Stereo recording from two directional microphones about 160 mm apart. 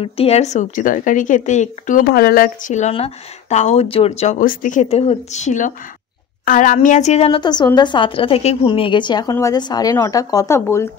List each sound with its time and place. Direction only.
0.0 s a woman's voice: 40° left (ahead or behind)
2.0 s a woman's voice: 70° left (ahead or behind); by 5.7 s 50° left (ahead or behind)
6.4 s a woman's voice: 60° left (ahead or behind); by 7.3 s 45° left (ahead or behind)
7.3 s a woman's voice: 25° left (ahead or behind)